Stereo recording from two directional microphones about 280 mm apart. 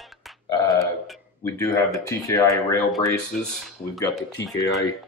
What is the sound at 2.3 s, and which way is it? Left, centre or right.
Speech, centre.